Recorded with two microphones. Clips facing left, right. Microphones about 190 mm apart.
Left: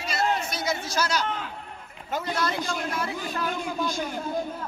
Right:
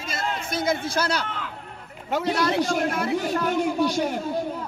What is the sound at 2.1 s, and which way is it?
Speech, 70° right (ahead or behind).